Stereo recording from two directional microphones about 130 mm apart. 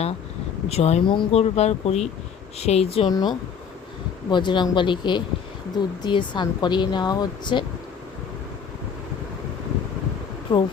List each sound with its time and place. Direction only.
0.7 s speech: 55° left (ahead or behind)
3.1 s a woman's voice: 30° left (ahead or behind)
10.5 s a woman's voice: 40° left (ahead or behind)